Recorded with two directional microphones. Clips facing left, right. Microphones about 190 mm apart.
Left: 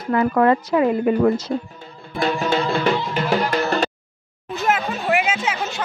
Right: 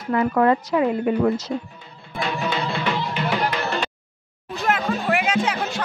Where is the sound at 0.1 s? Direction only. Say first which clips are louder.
Left 2 dB; 60° left (ahead or behind).